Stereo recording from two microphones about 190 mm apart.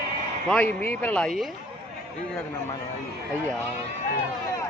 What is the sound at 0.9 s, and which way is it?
Speech, 10° left (ahead or behind).